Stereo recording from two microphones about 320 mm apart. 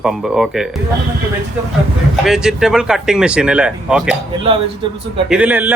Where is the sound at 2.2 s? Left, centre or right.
Centre.